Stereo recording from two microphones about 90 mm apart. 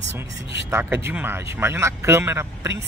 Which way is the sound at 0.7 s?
25° right (ahead or behind).